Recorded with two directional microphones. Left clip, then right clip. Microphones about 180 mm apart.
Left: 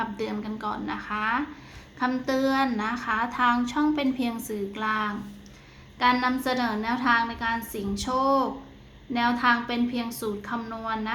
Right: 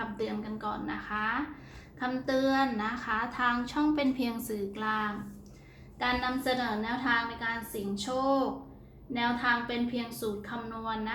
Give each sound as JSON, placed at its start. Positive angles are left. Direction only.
{"t": 0.2, "sound": "a woman's voice", "side_deg": 20}